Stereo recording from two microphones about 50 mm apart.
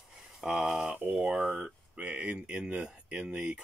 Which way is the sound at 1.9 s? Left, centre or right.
Right.